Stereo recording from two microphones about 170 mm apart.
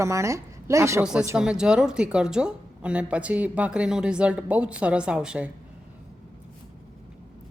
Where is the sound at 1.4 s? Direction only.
5° right (ahead or behind).